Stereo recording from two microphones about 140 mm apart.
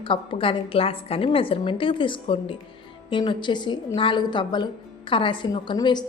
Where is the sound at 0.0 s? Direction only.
35° left (ahead or behind).